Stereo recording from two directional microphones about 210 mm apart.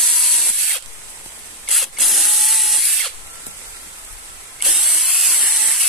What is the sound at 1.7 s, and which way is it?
Drill, centre (ahead or behind).